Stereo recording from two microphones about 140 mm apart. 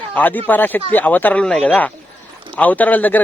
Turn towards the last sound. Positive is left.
turn(degrees=10)  # may be behind; listen again after turning